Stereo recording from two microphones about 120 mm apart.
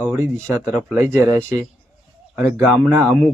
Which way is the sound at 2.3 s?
15° right (ahead or behind).